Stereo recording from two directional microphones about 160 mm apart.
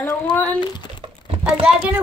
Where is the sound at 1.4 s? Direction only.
5° right (ahead or behind).